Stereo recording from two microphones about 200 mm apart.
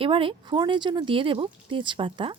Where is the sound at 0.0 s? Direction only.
25° right (ahead or behind).